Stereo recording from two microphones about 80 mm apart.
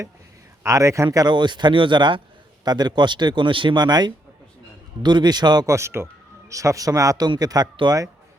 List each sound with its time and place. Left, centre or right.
0.6 s a man's voice: right
1.3 s speech: right
2.6 s a man's voice: right
5.6 s speech: right
7.3 s a man's voice: right